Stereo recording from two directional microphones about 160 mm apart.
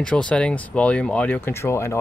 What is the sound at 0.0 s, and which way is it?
Speech, 5° left (ahead or behind).